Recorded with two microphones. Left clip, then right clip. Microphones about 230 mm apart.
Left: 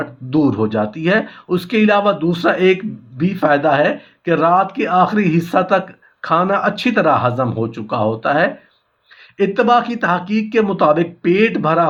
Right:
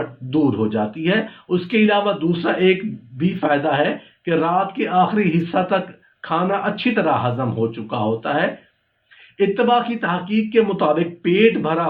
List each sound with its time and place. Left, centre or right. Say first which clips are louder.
0.3 s speech: left 3 dB; left